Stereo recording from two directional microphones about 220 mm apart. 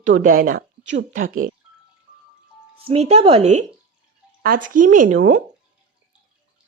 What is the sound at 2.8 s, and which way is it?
Speech, 25° right (ahead or behind).